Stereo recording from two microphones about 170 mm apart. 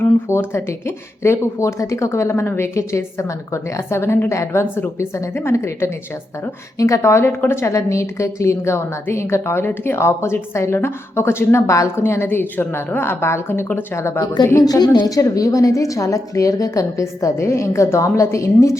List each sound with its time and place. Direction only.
0.0 s a woman's voice: 15° left (ahead or behind)